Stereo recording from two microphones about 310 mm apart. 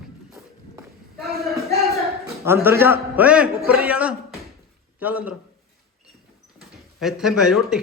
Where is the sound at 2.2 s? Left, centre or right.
Centre.